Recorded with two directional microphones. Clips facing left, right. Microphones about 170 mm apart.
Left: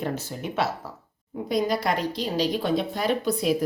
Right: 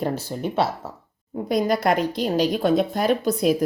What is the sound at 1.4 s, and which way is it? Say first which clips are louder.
A woman's voice: right 4 dB; 50° right (ahead or behind).